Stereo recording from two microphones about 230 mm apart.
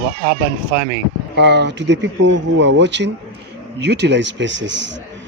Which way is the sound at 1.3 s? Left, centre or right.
Right.